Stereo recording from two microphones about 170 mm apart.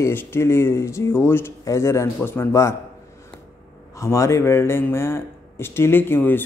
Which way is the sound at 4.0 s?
15° left (ahead or behind).